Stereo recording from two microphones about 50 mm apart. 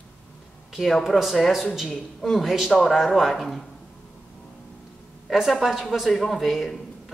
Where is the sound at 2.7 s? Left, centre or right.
Centre.